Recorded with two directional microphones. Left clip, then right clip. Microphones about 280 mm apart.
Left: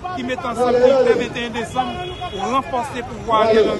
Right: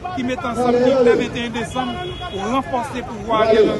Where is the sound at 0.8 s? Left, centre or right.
Left.